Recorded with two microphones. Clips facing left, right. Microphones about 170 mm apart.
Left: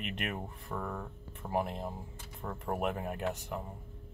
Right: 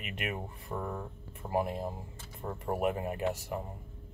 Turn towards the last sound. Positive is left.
turn(degrees=-5)  # may be behind; listen again after turning